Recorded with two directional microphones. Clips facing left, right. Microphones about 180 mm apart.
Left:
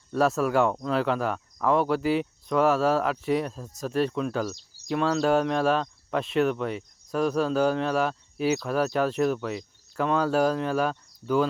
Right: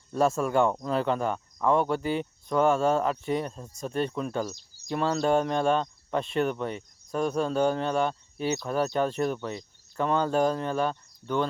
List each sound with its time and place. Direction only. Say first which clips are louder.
0.1 s speech: left 1 dB; centre (ahead or behind)